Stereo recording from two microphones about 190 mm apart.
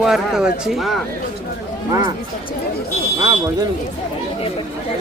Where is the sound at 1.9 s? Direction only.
15° right (ahead or behind).